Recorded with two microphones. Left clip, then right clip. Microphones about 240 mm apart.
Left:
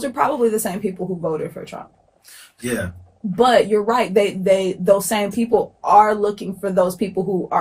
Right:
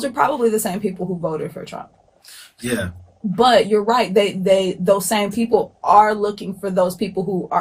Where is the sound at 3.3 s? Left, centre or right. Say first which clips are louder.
Right 1 dB; right.